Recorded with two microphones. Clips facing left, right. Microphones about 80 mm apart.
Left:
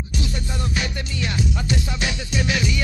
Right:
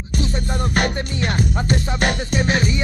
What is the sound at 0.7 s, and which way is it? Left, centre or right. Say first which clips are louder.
Music: right 6 dB; right.